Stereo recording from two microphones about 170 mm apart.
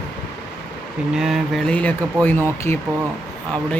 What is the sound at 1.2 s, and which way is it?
Speech, centre (ahead or behind).